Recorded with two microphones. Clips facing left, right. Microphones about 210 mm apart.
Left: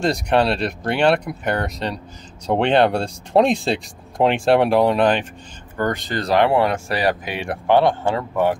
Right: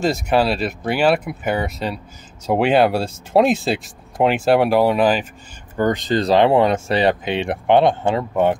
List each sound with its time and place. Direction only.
0.0 s speech: centre (ahead or behind)
5.8 s speech: 20° right (ahead or behind)